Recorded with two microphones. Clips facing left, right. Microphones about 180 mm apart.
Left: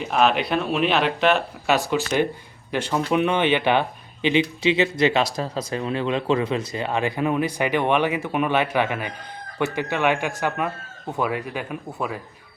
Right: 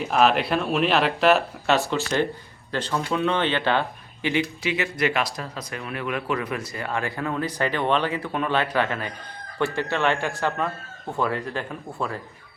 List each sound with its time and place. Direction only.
0.0 s speech: centre (ahead or behind)
1.6 s speech: 10° left (ahead or behind)